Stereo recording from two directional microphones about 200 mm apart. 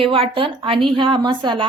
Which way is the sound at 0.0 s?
25° right (ahead or behind).